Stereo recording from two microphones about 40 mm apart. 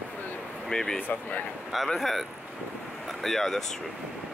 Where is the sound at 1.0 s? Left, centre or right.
Left.